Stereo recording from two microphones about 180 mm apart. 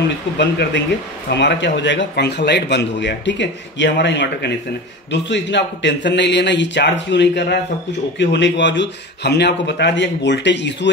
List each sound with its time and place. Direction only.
0.4 s a man's voice: 75° left (ahead or behind)